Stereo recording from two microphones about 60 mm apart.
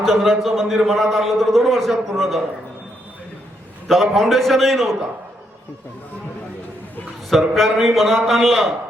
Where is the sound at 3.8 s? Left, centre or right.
Centre.